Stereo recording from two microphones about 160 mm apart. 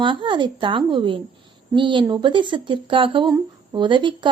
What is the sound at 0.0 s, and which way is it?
A woman's voice, 30° right (ahead or behind).